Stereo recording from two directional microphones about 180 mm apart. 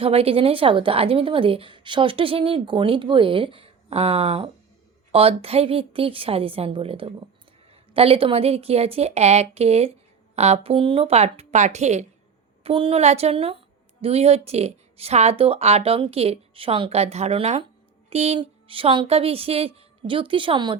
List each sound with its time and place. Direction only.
0.0 s a woman's voice: 30° right (ahead or behind)